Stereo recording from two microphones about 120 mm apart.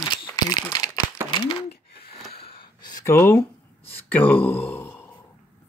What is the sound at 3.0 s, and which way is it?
Speech, 20° left (ahead or behind).